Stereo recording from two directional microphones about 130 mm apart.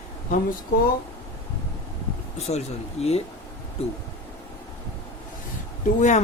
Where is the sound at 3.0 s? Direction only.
50° left (ahead or behind).